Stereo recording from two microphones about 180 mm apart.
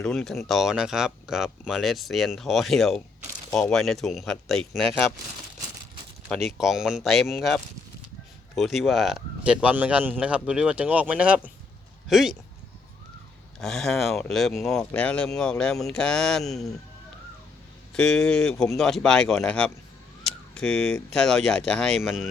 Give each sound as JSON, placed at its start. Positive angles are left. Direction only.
{"t": 0.0, "sound": "speech", "side_deg": 0}
{"t": 6.2, "sound": "speech", "side_deg": 0}
{"t": 13.6, "sound": "speech", "side_deg": 0}
{"t": 17.9, "sound": "speech", "side_deg": 5}